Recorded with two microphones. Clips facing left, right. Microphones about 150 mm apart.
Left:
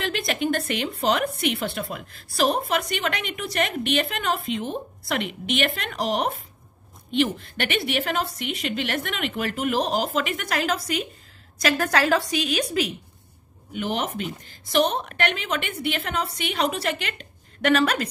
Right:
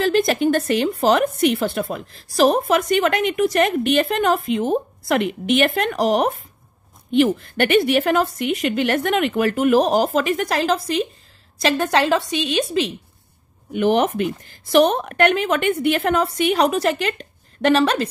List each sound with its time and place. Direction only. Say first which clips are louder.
0.0 s speech: right 9 dB; 40° right (ahead or behind)
2.0 s a woman's voice: right 7 dB; 35° right (ahead or behind)
2.5 s speech: right 8 dB; 45° right (ahead or behind)
7.4 s a woman's voice: right 10 dB; 45° right (ahead or behind); by 12.9 s 25° right (ahead or behind)
13.8 s speech: right 10 dB; 60° right (ahead or behind); by 18.0 s 30° right (ahead or behind)